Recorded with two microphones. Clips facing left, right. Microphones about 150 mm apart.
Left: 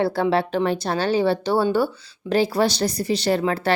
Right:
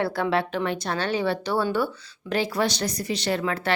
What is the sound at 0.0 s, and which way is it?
Speech, 30° left (ahead or behind).